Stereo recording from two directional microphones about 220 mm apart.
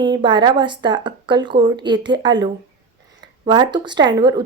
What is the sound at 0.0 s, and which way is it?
Speech, 20° right (ahead or behind).